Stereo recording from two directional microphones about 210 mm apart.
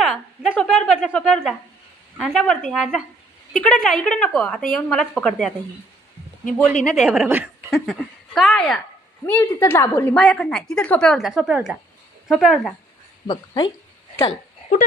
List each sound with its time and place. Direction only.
0.1 s a woman's voice: 5° left (ahead or behind)
6.7 s a woman's voice: centre (ahead or behind)
13.3 s speech: 20° left (ahead or behind)